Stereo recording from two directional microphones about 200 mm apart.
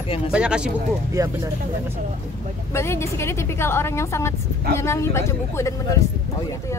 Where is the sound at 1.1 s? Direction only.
15° right (ahead or behind).